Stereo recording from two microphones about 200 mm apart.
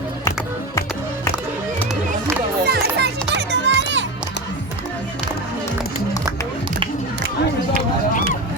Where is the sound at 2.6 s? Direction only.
55° right (ahead or behind).